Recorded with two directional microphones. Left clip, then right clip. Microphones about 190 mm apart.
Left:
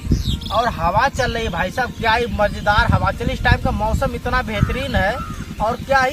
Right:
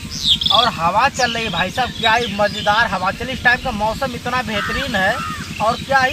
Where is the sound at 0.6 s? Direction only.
5° right (ahead or behind).